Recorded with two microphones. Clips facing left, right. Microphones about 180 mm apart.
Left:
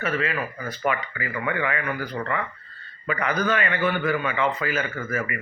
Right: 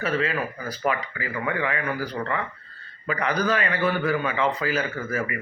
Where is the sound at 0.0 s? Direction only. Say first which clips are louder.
Right 1 dB; 30° right (ahead or behind).